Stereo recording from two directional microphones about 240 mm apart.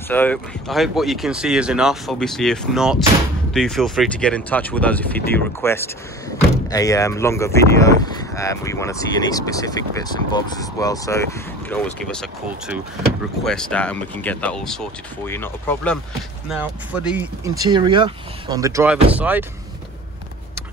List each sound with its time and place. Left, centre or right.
0.1 s speech: centre
16.4 s speech: centre